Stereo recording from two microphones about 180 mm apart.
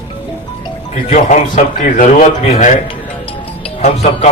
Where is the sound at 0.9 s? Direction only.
40° left (ahead or behind).